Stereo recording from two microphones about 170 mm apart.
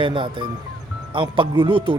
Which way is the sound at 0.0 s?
30° right (ahead or behind).